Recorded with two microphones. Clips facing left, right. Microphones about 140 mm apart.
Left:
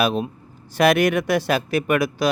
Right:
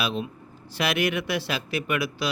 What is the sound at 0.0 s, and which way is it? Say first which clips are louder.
Speech: left 7 dB; 45° left (ahead or behind).